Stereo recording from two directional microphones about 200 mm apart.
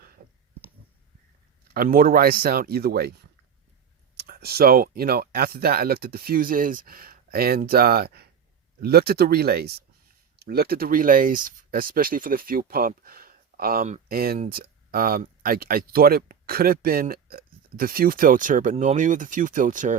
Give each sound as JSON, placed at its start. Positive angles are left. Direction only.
{"t": 1.7, "sound": "speech", "side_deg": -45}
{"t": 4.2, "sound": "speech", "side_deg": -50}